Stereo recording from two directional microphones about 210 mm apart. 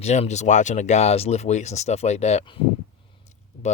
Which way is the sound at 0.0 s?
35° left (ahead or behind).